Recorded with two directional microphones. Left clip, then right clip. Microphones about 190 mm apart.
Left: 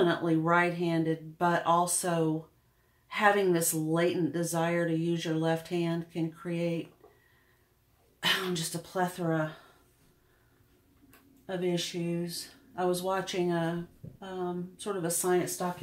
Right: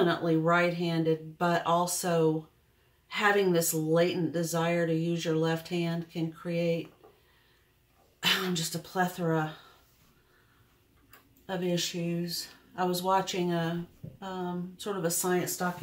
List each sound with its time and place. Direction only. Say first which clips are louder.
0.0 s speech: right 1 dB; 30° left (ahead or behind)
8.2 s speech: right 1 dB; 30° left (ahead or behind)
12.3 s speech: right 4 dB; 25° left (ahead or behind)
14.2 s speech: even; 20° left (ahead or behind)